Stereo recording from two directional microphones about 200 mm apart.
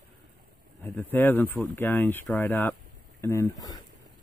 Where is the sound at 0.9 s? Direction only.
10° left (ahead or behind).